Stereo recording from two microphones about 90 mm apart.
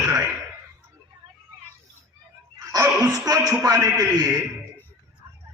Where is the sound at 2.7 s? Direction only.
40° right (ahead or behind).